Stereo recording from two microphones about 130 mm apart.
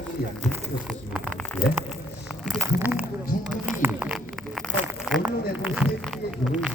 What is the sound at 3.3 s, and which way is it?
Speech, 90° left.